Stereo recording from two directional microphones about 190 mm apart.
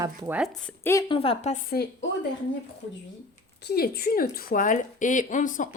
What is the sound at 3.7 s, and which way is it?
A woman's voice, 55° left (ahead or behind).